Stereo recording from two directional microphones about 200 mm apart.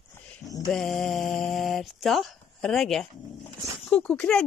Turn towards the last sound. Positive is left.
turn(degrees=5)  # may be behind; listen again after turning